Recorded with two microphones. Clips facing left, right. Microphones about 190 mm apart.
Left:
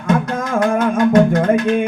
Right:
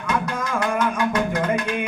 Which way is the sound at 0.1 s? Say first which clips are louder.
Left 7 dB; 50° left (ahead or behind).